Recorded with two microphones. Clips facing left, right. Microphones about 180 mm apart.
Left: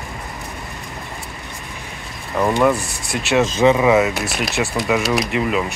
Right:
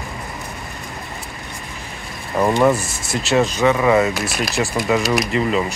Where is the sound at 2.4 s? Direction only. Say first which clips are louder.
Right 1 dB; 10° right (ahead or behind).